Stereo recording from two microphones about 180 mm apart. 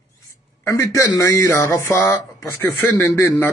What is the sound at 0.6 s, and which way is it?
Speech, 15° left (ahead or behind).